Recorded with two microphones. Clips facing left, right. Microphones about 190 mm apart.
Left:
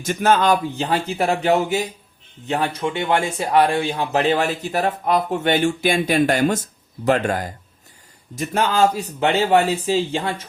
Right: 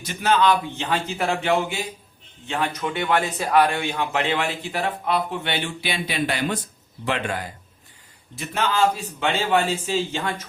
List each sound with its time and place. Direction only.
0.0 s speech: 45° left (ahead or behind)